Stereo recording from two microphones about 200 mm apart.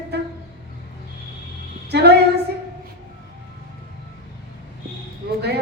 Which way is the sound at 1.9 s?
55° right (ahead or behind).